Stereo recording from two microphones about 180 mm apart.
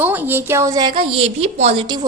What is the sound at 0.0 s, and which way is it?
A woman's voice, 10° right (ahead or behind).